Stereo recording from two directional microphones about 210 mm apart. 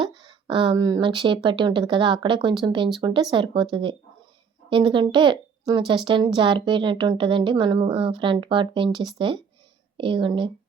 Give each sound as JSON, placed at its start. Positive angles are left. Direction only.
{"t": 0.0, "sound": "a woman's voice", "side_deg": -25}